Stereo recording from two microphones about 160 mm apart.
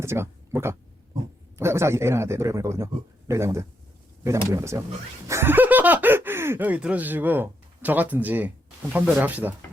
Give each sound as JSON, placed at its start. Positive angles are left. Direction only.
{"t": 0.0, "sound": "speech", "side_deg": -15}